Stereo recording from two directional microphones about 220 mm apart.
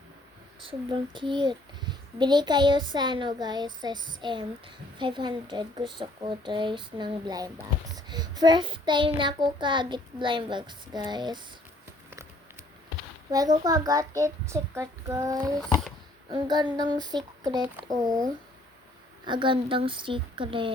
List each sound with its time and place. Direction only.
0.6 s child singing: 20° right (ahead or behind)
13.7 s a child's voice: 15° right (ahead or behind)
16.3 s child singing: 20° right (ahead or behind)
17.6 s a child's voice: 10° right (ahead or behind)
19.2 s child singing: 20° right (ahead or behind)